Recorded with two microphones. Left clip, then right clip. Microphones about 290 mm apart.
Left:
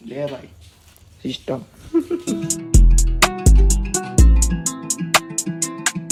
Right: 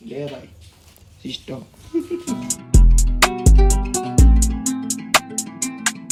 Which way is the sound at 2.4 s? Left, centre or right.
Centre.